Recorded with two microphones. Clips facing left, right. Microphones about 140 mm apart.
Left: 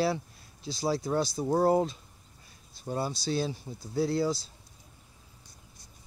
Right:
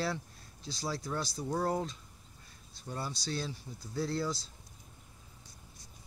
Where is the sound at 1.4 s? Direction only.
35° left (ahead or behind).